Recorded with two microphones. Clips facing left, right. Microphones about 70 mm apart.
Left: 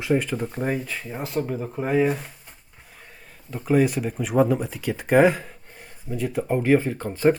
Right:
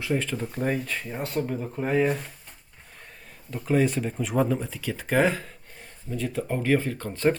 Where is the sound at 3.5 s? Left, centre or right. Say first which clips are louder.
Left 3 dB; centre.